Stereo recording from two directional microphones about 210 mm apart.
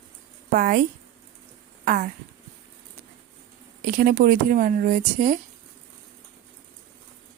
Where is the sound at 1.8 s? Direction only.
40° right (ahead or behind).